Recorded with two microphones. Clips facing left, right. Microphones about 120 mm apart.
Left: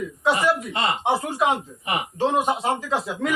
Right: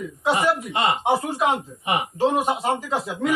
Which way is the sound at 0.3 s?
25° right (ahead or behind).